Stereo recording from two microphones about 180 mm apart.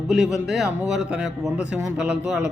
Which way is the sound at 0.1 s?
Centre (ahead or behind).